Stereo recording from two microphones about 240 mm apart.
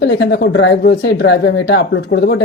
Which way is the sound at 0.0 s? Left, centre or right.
Left.